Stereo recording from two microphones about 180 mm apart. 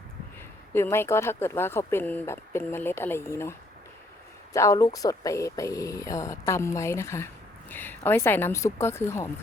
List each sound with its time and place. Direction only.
0.7 s speech: 15° left (ahead or behind)
4.5 s speech: 15° left (ahead or behind)